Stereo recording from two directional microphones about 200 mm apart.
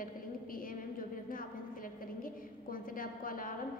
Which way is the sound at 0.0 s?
45° left (ahead or behind).